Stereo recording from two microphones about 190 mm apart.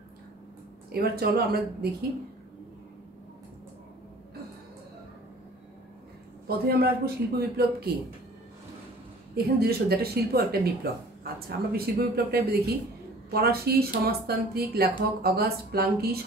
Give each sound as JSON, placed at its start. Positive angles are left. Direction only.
{"t": 0.9, "sound": "speech", "side_deg": -55}
{"t": 6.4, "sound": "speech", "side_deg": -55}
{"t": 9.3, "sound": "speech", "side_deg": -55}